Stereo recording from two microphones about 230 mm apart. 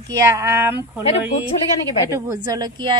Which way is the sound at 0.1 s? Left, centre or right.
Centre.